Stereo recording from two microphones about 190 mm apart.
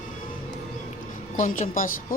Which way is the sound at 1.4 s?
40° left (ahead or behind).